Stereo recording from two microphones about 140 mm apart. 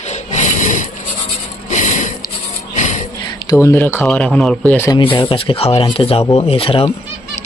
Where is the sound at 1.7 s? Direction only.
60° left (ahead or behind).